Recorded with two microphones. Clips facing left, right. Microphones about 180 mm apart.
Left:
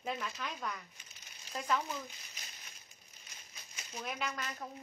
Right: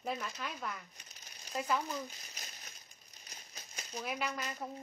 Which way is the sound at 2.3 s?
40° right (ahead or behind).